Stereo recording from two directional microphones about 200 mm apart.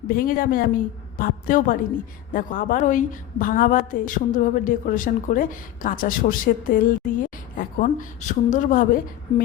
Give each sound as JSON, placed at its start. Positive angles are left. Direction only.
{"t": 0.1, "sound": "a woman's voice", "side_deg": 45}